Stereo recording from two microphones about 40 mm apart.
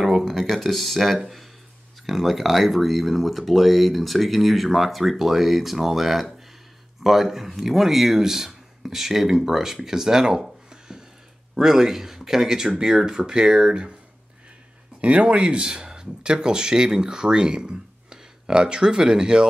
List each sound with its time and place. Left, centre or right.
0.3 s speech: centre
10.7 s a sound: centre
11.5 s speech: centre
15.0 s speech: right